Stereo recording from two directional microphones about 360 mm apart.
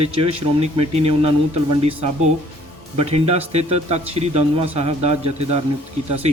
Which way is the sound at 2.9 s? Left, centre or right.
Centre.